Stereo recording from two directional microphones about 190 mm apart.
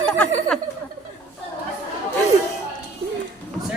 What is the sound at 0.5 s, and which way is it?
Speech, centre (ahead or behind).